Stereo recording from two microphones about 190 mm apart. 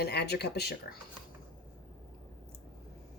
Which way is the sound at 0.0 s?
60° left (ahead or behind).